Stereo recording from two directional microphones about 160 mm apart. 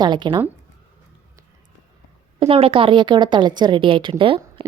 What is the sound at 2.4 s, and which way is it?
A woman's voice, 35° right (ahead or behind).